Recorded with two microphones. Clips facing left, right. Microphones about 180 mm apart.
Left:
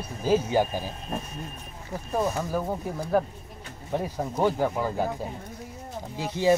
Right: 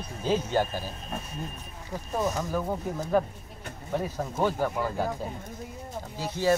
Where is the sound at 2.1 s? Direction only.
10° left (ahead or behind).